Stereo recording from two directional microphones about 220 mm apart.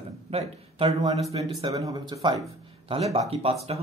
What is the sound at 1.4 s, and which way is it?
Speech, 20° right (ahead or behind).